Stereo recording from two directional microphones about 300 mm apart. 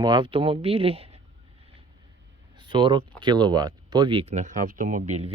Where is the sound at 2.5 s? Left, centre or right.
Centre.